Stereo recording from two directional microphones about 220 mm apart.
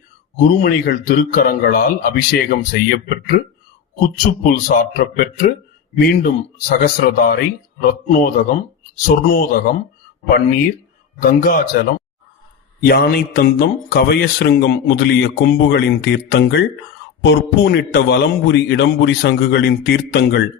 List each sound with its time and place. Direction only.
0.6 s a man's voice: 45° left (ahead or behind)
11.2 s speech: 40° left (ahead or behind)
12.8 s speech: 50° left (ahead or behind)